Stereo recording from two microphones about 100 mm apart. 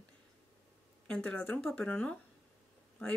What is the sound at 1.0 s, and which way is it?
Speech, 15° left (ahead or behind).